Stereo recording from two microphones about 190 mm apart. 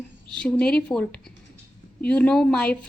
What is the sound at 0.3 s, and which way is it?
A woman's voice, 5° left (ahead or behind).